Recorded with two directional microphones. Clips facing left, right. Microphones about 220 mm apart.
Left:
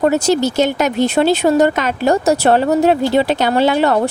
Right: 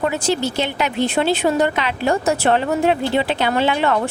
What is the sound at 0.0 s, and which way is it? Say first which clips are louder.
Speech: left 6 dB; 45° left (ahead or behind).